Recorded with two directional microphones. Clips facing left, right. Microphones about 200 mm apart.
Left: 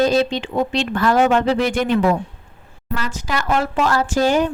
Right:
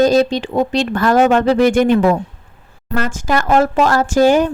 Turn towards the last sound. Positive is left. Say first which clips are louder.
# right 5 dB
turn(degrees=-45)  # may be behind; listen again after turning